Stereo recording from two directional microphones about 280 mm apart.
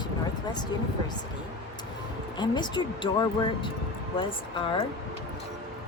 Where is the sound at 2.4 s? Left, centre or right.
Centre.